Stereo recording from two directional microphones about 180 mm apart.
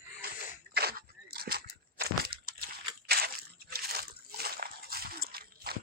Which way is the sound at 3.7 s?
60° right (ahead or behind).